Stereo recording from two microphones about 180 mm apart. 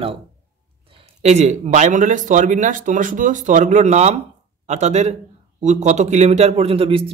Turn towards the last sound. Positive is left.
turn(degrees=-30)  # may be behind; listen again after turning